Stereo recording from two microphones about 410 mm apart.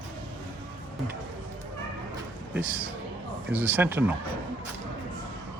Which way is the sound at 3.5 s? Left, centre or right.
Centre.